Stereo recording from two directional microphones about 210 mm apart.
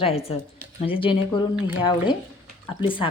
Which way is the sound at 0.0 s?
30° left (ahead or behind).